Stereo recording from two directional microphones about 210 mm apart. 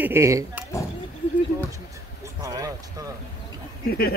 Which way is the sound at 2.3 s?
15° right (ahead or behind).